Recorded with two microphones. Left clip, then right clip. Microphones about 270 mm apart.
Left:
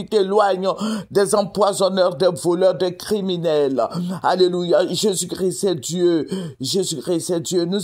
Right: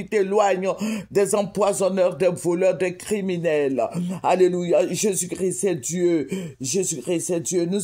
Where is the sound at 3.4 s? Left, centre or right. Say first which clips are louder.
Left 3 dB; left.